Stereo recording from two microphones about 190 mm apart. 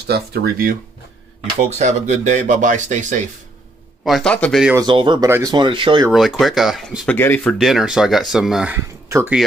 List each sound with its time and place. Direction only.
0.0 s speech: 60° right (ahead or behind)
1.7 s speech: 35° right (ahead or behind)
4.0 s speech: centre (ahead or behind)
4.7 s speech: 25° right (ahead or behind)
6.1 s speech: centre (ahead or behind)
7.2 s speech: 10° left (ahead or behind); by 9.4 s 10° right (ahead or behind)